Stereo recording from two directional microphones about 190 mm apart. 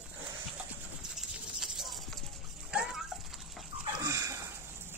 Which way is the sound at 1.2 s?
Centre (ahead or behind).